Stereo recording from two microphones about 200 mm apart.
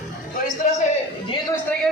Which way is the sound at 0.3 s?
40° left (ahead or behind).